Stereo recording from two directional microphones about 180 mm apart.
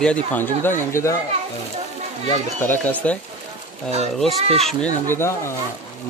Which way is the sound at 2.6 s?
10° left (ahead or behind).